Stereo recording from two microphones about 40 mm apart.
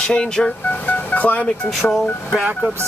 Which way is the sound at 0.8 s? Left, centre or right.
Left.